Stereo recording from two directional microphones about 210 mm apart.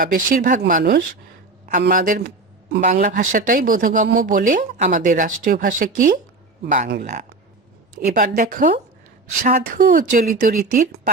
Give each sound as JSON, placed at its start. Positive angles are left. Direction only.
{"t": 0.0, "sound": "a man's voice", "side_deg": -40}
{"t": 7.9, "sound": "a woman's voice", "side_deg": -45}